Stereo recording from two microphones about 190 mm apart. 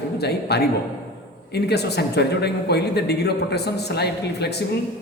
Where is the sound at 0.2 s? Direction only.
60° left (ahead or behind).